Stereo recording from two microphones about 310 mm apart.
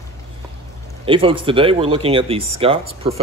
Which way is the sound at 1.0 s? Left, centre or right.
Centre.